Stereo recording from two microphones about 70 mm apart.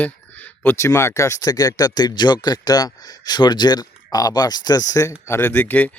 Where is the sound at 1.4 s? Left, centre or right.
Left.